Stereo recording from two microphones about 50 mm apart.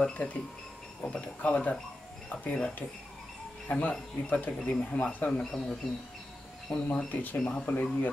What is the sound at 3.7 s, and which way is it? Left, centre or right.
Speech, left.